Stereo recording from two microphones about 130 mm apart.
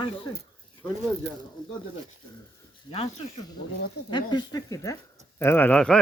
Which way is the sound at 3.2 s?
50° left (ahead or behind).